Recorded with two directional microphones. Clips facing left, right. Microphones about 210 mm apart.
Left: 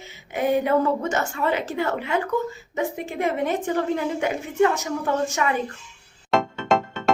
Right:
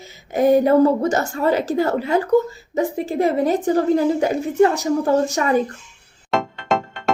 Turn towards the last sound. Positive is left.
turn(degrees=0)  # may be behind; listen again after turning